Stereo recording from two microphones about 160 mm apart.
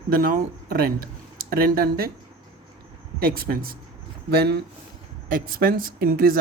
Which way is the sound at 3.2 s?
70° right (ahead or behind).